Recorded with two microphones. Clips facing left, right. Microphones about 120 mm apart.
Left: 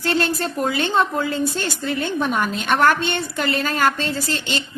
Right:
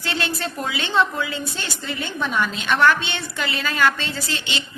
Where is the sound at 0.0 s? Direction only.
45° left (ahead or behind).